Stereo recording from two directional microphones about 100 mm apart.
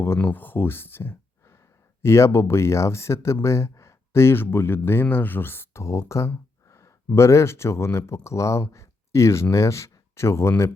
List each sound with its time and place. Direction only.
0.0 s speech: 20° left (ahead or behind)